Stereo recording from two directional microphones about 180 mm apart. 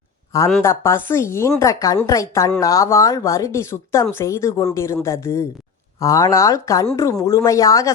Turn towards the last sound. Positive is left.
turn(degrees=20)  # may be behind; listen again after turning